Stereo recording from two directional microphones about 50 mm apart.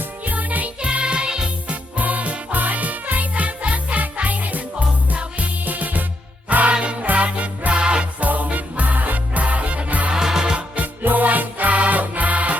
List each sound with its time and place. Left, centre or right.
0.3 s music: right
0.9 s music: centre
1.7 s music: right
8.2 s music: right
10.1 s music: centre
10.8 s music: right